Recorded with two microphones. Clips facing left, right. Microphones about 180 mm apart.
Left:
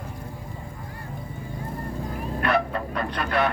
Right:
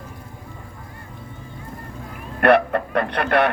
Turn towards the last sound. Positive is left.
turn(degrees=-65)  # may be behind; listen again after turning